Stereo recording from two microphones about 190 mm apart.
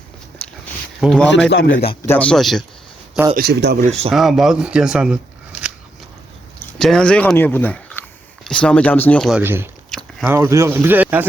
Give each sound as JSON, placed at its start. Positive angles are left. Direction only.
{"t": 1.0, "sound": "speech", "side_deg": 5}
{"t": 1.5, "sound": "a man's voice", "side_deg": 60}
{"t": 2.0, "sound": "speech", "side_deg": 10}
{"t": 3.3, "sound": "speech", "side_deg": -60}
{"t": 4.1, "sound": "speech", "side_deg": 0}
{"t": 6.6, "sound": "speech", "side_deg": 5}
{"t": 9.4, "sound": "speech", "side_deg": -10}
{"t": 9.9, "sound": "biting", "side_deg": 5}
{"t": 10.2, "sound": "speech", "side_deg": -15}